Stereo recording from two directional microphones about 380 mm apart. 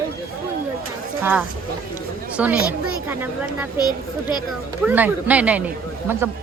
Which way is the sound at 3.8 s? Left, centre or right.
Centre.